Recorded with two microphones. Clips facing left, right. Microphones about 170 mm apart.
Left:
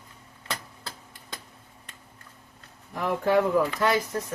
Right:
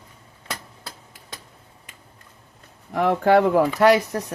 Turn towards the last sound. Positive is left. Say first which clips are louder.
# right 8 dB
turn(degrees=-75)  # may be behind; listen again after turning